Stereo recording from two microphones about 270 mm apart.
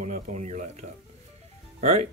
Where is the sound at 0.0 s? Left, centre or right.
Right.